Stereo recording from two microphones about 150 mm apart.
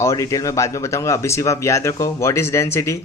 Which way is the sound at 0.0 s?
20° left (ahead or behind).